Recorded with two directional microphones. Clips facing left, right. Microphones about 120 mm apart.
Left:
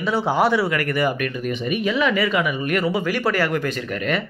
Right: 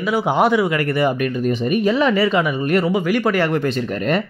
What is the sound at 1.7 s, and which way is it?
Speech, 40° right (ahead or behind).